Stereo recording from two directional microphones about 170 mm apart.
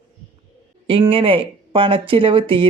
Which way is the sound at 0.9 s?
30° right (ahead or behind).